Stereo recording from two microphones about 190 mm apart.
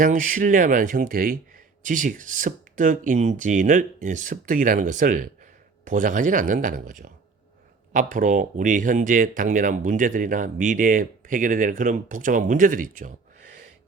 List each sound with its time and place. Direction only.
0.0 s speech: 45° right (ahead or behind)